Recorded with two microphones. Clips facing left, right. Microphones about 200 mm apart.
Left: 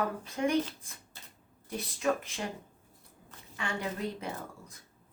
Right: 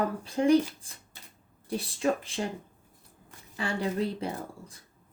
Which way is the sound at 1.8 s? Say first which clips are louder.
Right 2 dB; 30° right (ahead or behind).